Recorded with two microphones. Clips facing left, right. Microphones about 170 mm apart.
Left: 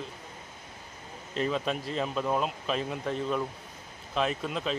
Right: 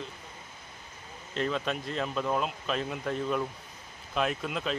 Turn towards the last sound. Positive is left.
turn(degrees=0)  # may be behind; listen again after turning